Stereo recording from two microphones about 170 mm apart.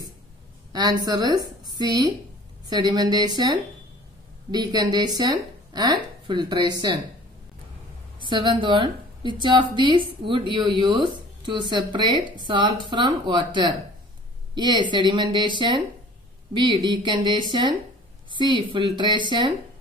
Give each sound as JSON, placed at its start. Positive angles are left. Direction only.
{"t": 0.7, "sound": "a woman's voice", "side_deg": -25}
{"t": 8.2, "sound": "a woman's voice", "side_deg": -30}